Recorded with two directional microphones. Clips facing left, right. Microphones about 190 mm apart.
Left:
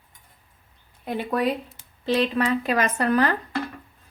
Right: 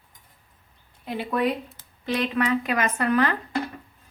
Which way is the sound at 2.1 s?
30° left (ahead or behind).